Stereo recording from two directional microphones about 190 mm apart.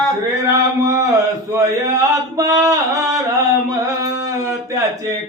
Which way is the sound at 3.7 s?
15° right (ahead or behind).